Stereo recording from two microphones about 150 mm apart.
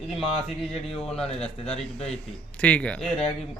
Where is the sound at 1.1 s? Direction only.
40° left (ahead or behind).